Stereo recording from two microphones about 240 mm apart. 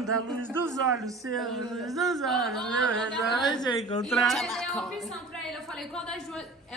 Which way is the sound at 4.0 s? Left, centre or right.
Centre.